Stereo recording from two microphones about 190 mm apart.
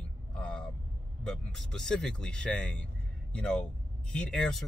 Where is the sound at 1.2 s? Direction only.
5° left (ahead or behind).